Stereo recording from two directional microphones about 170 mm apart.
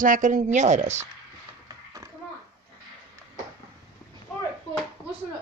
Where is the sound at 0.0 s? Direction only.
50° right (ahead or behind).